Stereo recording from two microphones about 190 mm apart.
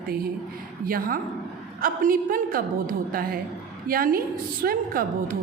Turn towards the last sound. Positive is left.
turn(degrees=-50)  # may be behind; listen again after turning